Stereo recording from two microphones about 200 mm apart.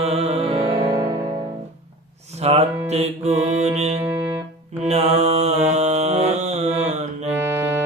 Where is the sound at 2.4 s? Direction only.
30° right (ahead or behind).